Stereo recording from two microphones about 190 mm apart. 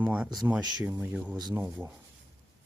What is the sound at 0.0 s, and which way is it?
Speech, 10° right (ahead or behind).